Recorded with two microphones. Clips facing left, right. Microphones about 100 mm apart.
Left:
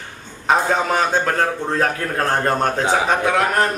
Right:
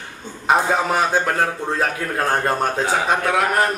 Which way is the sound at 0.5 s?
5° right (ahead or behind).